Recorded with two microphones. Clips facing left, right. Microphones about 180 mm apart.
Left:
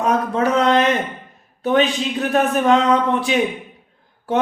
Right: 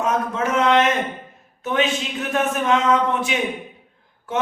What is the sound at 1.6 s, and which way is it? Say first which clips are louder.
A man's voice: left 5 dB; 35° left (ahead or behind).